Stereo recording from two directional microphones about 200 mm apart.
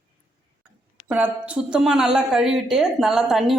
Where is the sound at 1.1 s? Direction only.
5° right (ahead or behind).